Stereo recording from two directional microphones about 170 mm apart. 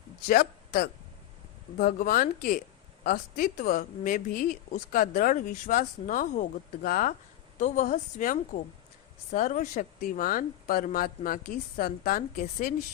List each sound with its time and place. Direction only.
0.3 s a woman's voice: 55° left (ahead or behind)